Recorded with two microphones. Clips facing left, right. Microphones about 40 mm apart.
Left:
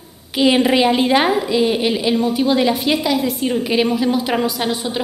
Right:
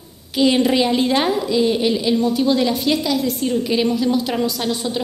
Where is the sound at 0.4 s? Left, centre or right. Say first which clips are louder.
Left 2 dB; centre.